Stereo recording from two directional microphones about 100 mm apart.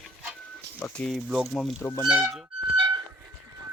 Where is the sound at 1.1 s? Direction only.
Centre (ahead or behind).